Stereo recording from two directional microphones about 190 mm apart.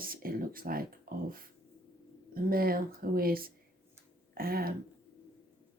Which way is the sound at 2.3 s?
50° right (ahead or behind).